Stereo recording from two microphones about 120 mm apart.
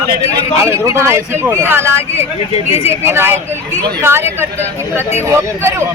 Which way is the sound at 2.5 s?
60° left (ahead or behind).